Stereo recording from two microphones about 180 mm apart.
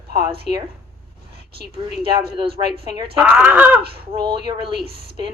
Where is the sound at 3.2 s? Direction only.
5° right (ahead or behind).